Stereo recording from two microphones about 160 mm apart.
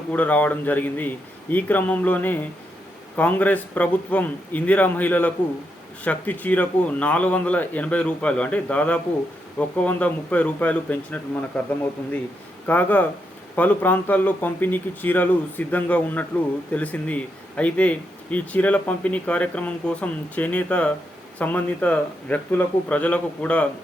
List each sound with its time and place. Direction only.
0.1 s speech: 10° left (ahead or behind)
12.6 s speech: 10° left (ahead or behind)